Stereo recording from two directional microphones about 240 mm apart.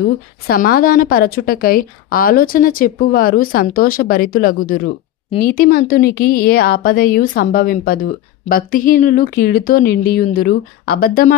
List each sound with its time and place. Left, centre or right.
0.5 s speech: left